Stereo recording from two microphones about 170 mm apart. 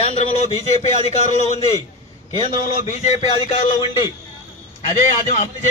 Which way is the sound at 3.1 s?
35° left (ahead or behind).